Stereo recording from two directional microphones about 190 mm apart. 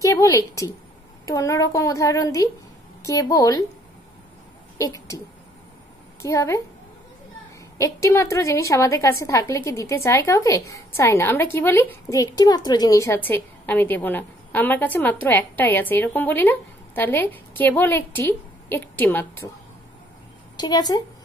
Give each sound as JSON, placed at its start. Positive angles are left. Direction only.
{"t": 0.0, "sound": "a woman's voice", "side_deg": 15}
{"t": 4.7, "sound": "a woman's voice", "side_deg": 15}
{"t": 6.2, "sound": "a woman's voice", "side_deg": 15}
{"t": 7.7, "sound": "a woman's voice", "side_deg": 15}
{"t": 20.5, "sound": "speech", "side_deg": 20}